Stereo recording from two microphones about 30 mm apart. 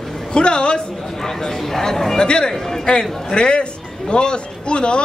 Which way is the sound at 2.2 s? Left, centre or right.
Left.